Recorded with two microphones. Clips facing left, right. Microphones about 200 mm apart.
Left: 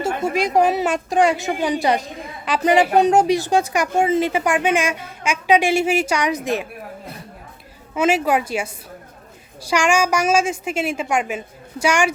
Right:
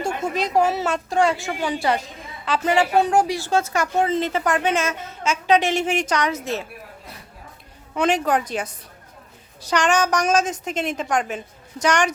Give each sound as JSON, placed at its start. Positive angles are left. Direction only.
{"t": 0.3, "sound": "a woman's voice", "side_deg": 15}
{"t": 7.9, "sound": "a woman's voice", "side_deg": 5}